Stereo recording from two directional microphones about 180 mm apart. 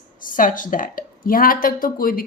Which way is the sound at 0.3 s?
50° left (ahead or behind).